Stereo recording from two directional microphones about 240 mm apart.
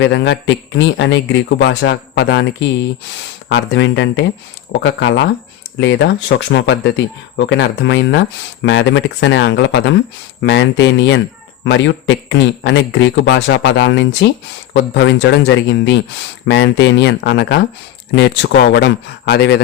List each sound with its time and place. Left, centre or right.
0.0 s a man's voice: left